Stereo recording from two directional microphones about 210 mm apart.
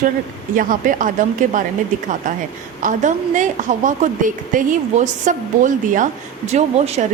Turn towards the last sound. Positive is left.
turn(degrees=-30)  # may be behind; listen again after turning